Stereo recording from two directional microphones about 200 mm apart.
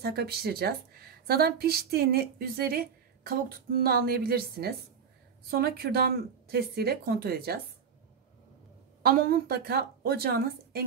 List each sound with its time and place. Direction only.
0.0 s a woman's voice: 55° right (ahead or behind)
9.0 s a woman's voice: 50° right (ahead or behind)